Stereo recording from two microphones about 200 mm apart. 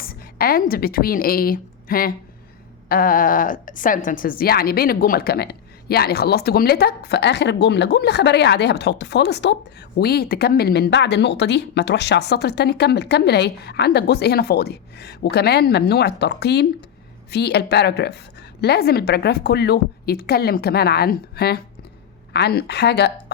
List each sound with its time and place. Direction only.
0.0 s a woman's voice: 50° left (ahead or behind)